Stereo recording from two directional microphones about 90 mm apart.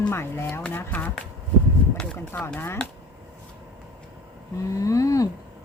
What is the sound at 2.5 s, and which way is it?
Speech, 30° left (ahead or behind).